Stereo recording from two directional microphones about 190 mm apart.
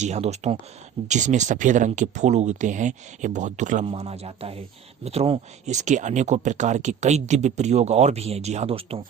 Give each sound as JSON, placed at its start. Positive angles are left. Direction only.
{"t": 0.0, "sound": "speech", "side_deg": -35}